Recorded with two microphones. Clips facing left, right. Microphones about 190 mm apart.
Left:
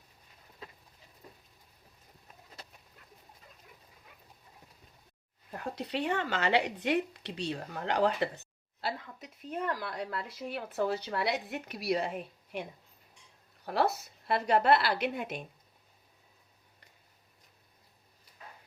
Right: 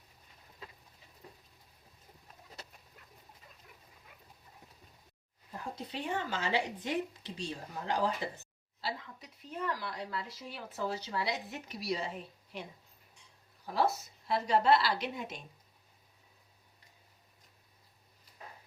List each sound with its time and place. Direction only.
5.5 s speech: 65° left (ahead or behind)
8.8 s speech: 55° left (ahead or behind)
13.7 s speech: 65° left (ahead or behind)